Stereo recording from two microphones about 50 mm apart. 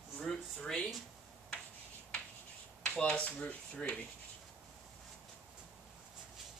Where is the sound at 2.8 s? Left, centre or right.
Left.